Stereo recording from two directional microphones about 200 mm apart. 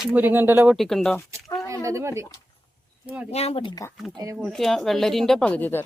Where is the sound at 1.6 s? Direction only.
15° right (ahead or behind).